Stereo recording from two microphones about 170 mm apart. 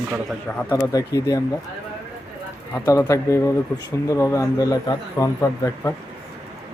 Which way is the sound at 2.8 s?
20° left (ahead or behind).